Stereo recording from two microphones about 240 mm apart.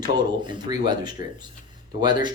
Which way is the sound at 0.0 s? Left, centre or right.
Centre.